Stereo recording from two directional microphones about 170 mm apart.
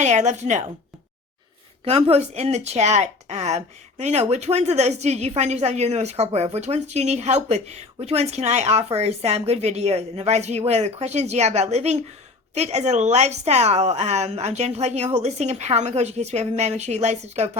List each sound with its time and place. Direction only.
0.0 s a woman's voice: 45° right (ahead or behind)
1.8 s speech: 35° right (ahead or behind)